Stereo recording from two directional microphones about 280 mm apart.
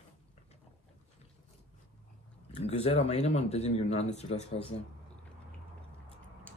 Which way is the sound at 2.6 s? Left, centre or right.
Left.